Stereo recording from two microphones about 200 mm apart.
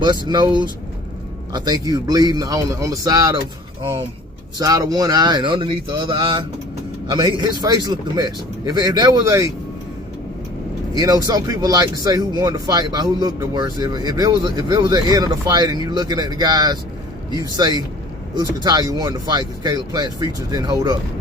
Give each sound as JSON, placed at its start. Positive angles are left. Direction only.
{"t": 0.0, "sound": "a man's voice", "side_deg": -20}
{"t": 4.5, "sound": "a man's voice", "side_deg": -20}
{"t": 10.9, "sound": "a man's voice", "side_deg": -20}